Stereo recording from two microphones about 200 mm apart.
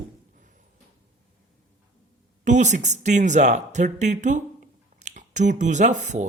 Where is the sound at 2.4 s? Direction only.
35° right (ahead or behind).